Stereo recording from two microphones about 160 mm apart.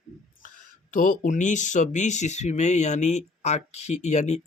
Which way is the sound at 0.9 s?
55° left (ahead or behind).